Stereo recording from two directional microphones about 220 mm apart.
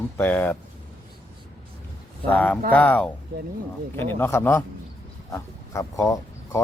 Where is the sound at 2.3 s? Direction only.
5° left (ahead or behind).